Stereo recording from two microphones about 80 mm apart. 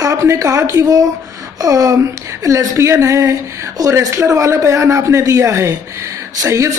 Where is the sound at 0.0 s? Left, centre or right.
Right.